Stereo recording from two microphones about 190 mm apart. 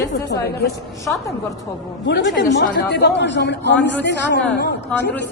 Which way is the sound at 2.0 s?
70° left (ahead or behind).